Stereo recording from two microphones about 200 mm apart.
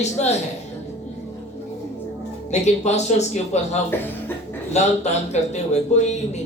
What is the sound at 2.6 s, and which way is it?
Speech, 35° left (ahead or behind).